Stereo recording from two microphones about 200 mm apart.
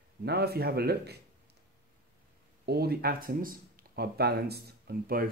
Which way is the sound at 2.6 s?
50° right (ahead or behind).